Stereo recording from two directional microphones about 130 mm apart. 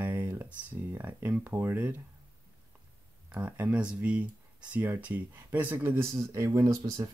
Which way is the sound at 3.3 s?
10° right (ahead or behind).